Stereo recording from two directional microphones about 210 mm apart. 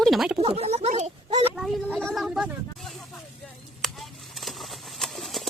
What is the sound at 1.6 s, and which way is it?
Speech, centre (ahead or behind).